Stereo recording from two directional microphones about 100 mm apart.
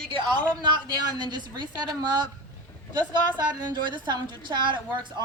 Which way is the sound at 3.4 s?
50° right (ahead or behind).